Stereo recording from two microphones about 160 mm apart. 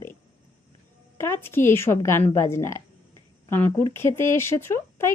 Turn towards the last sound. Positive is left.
turn(degrees=15)  # may be behind; listen again after turning